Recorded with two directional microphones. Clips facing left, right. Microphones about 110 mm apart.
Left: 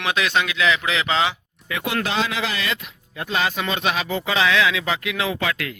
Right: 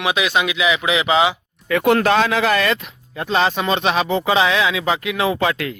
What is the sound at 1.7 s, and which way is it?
Speech, 50° right (ahead or behind).